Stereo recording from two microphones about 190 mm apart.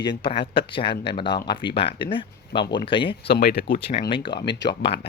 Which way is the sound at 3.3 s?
55° left (ahead or behind).